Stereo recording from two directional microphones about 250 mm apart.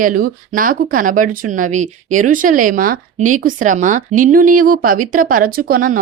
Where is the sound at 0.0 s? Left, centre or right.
Right.